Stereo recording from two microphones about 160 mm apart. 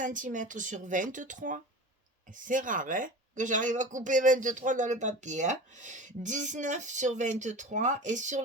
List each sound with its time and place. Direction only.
0.0 s speech: 55° right (ahead or behind)